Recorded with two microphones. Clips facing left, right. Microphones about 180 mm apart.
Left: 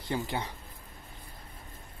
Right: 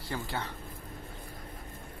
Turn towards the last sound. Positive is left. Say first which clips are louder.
# left 3 dB
turn(degrees=15)  # may be behind; listen again after turning